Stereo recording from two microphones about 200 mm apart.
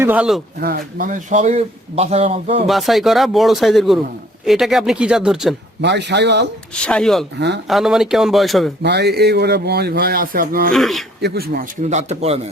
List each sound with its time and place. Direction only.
0.0 s speech: 5° right (ahead or behind)
0.6 s speech: 45° right (ahead or behind); by 2.6 s 30° right (ahead or behind)
2.6 s speech: centre (ahead or behind)
5.8 s speech: 60° right (ahead or behind)
6.7 s speech: 5° left (ahead or behind)
7.3 s speech: 55° right (ahead or behind)
7.7 s speech: centre (ahead or behind)
8.8 s a man's voice: 55° right (ahead or behind)
10.7 s speech: centre (ahead or behind)
11.2 s a man's voice: 50° right (ahead or behind)
11.8 s speech: 35° right (ahead or behind)